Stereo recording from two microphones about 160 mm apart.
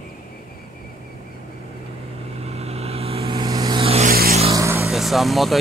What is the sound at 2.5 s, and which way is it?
Vehicle, 40° right (ahead or behind).